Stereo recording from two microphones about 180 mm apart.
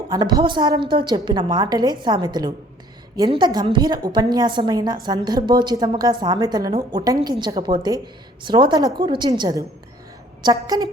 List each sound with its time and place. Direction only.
0.1 s a woman's voice: 20° right (ahead or behind)